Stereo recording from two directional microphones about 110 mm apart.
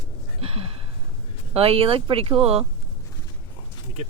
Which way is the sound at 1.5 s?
60° right (ahead or behind).